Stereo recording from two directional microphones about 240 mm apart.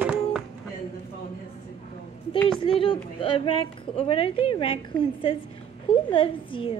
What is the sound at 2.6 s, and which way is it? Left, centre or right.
Speech, left.